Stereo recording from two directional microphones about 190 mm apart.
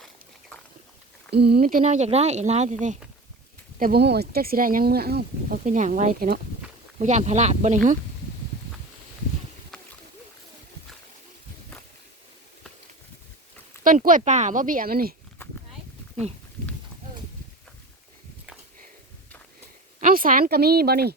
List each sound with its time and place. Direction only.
1.3 s speech: 60° right (ahead or behind); by 3.0 s 40° right (ahead or behind)
3.8 s speech: 50° right (ahead or behind)
7.0 s speech: 40° right (ahead or behind)
9.7 s a sound: 5° left (ahead or behind)
13.8 s speech: 45° right (ahead or behind)
20.0 s speech: 45° right (ahead or behind)